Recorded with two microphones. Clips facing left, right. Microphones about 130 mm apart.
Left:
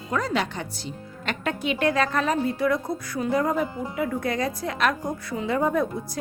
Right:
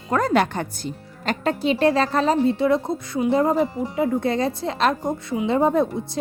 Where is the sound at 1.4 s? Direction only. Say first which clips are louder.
Right 5 dB; 35° right (ahead or behind).